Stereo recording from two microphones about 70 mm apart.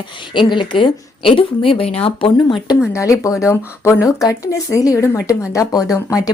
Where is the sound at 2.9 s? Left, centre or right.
Left.